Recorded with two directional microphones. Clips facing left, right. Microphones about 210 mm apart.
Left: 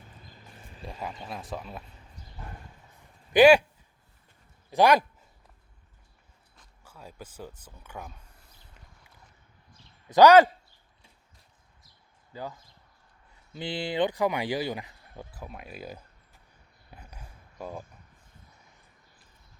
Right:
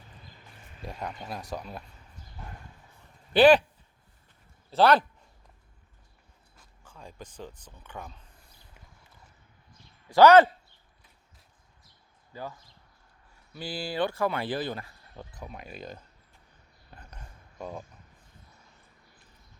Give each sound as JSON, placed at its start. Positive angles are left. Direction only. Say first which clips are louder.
{"t": 0.9, "sound": "speech", "louder": "right 1 dB", "side_deg": 0}
{"t": 3.3, "sound": "speech", "louder": "left 1 dB", "side_deg": 10}
{"t": 4.7, "sound": "speech", "louder": "even", "side_deg": 10}
{"t": 6.8, "sound": "speech", "louder": "even", "side_deg": 5}
{"t": 10.1, "sound": "speech", "louder": "even", "side_deg": 15}
{"t": 12.3, "sound": "speech", "louder": "left 1 dB", "side_deg": 15}
{"t": 16.9, "sound": "a sound", "louder": "even", "side_deg": 10}